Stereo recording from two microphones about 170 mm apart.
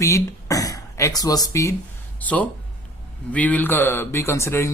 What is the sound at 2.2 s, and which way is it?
A man's voice, 10° left (ahead or behind).